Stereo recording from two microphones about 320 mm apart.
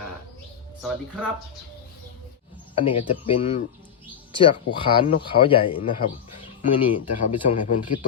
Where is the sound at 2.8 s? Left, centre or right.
Centre.